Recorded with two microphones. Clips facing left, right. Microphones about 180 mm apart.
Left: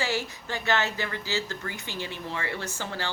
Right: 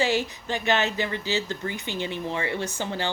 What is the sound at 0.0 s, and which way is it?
A woman's voice, 20° right (ahead or behind).